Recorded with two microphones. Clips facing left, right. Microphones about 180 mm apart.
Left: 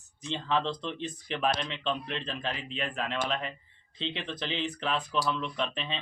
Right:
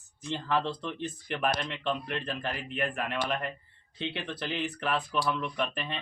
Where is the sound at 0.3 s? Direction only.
10° right (ahead or behind).